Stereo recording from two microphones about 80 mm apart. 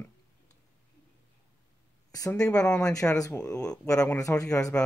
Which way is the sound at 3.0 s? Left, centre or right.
Left.